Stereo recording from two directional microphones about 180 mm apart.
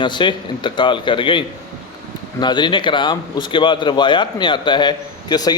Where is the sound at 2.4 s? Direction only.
25° left (ahead or behind).